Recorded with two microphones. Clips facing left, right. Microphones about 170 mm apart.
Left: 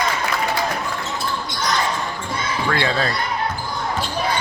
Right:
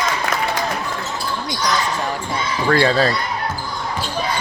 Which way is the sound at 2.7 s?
40° right (ahead or behind).